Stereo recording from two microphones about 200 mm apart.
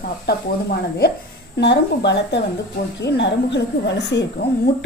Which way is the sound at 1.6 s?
60° left (ahead or behind).